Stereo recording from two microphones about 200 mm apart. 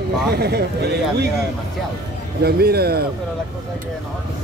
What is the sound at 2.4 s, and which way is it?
Speech, 50° right (ahead or behind).